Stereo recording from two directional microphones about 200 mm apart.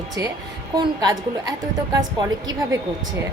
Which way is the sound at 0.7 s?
20° right (ahead or behind).